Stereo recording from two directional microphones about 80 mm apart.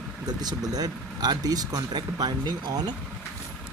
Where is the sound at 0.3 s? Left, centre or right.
Right.